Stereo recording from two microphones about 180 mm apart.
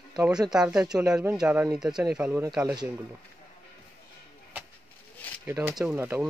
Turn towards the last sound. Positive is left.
turn(degrees=-10)  # may be behind; listen again after turning